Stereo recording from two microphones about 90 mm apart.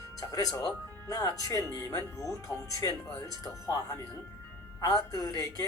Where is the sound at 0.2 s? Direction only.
40° left (ahead or behind).